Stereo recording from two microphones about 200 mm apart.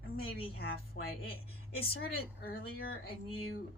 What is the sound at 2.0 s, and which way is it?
Speech, 50° left (ahead or behind).